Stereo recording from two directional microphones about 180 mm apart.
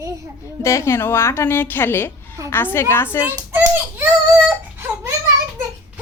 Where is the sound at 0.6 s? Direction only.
15° left (ahead or behind).